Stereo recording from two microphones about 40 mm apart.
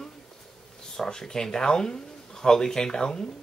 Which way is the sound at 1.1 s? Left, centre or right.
Centre.